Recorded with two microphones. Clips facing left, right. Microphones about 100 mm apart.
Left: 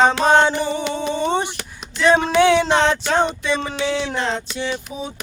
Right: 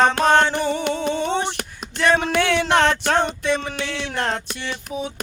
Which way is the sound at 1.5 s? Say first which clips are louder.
Right 3 dB; 55° right (ahead or behind).